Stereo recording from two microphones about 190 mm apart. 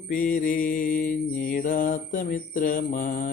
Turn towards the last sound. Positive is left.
turn(degrees=45)  # may be behind; listen again after turning